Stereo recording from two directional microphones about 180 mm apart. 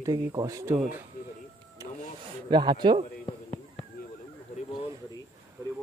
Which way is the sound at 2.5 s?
25° right (ahead or behind).